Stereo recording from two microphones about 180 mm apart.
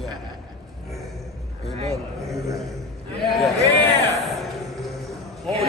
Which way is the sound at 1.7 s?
35° right (ahead or behind).